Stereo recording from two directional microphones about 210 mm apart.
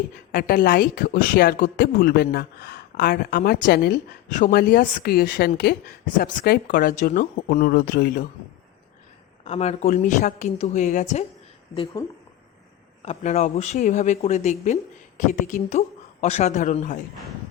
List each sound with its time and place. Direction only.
0.3 s speech: 45° left (ahead or behind)
9.4 s speech: 30° left (ahead or behind)
13.0 s speech: 30° left (ahead or behind)